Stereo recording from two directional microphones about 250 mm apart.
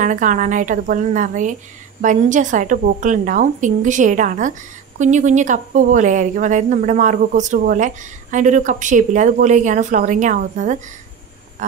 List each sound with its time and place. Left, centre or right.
0.0 s a woman's voice: right